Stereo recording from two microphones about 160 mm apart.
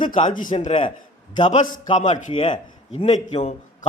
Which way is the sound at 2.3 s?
35° left (ahead or behind).